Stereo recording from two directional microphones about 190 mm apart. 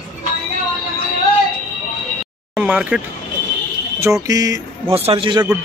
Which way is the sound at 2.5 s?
5° right (ahead or behind).